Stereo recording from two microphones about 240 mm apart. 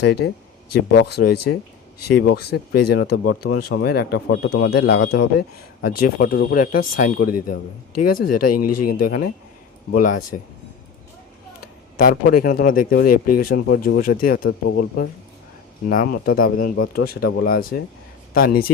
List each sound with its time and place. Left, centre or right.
0.0 s a man's voice: left
4.3 s a man's voice: left
8.4 s speech: left
8.9 s speech: left
11.6 s speech: left
16.6 s speech: left
16.9 s speech: left